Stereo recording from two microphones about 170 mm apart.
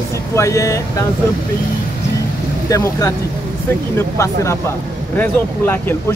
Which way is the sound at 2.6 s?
20° left (ahead or behind).